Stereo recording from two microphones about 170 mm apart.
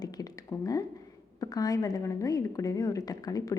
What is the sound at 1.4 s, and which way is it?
A woman's voice, 20° left (ahead or behind).